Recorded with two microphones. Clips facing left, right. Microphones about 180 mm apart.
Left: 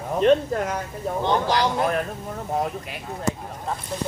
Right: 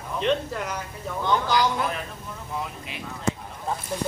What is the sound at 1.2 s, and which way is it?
Speech, 35° left (ahead or behind).